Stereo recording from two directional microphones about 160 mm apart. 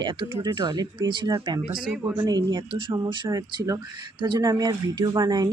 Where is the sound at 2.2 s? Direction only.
25° right (ahead or behind).